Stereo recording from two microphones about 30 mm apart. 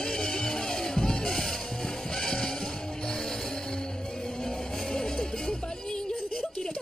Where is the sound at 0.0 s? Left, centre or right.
Centre.